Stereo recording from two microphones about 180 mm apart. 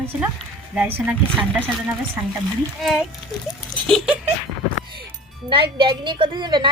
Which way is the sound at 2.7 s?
Centre (ahead or behind).